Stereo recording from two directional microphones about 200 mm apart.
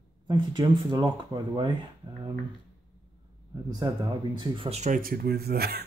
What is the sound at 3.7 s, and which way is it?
Speech, 20° right (ahead or behind).